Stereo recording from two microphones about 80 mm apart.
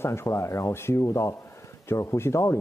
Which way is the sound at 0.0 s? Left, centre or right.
Left.